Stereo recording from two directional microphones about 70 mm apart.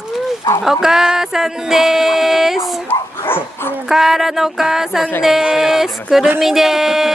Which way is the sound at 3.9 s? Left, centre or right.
Centre.